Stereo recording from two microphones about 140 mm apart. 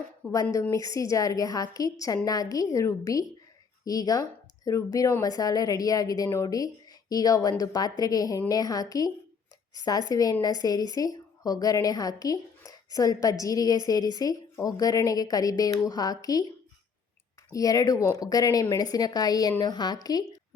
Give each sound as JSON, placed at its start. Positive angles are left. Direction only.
{"t": 0.2, "sound": "speech", "side_deg": 10}
{"t": 0.7, "sound": "a woman's voice", "side_deg": 25}
{"t": 17.5, "sound": "a woman's voice", "side_deg": 25}